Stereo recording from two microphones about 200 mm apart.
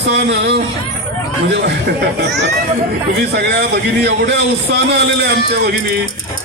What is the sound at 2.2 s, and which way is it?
A man's voice, 60° right (ahead or behind).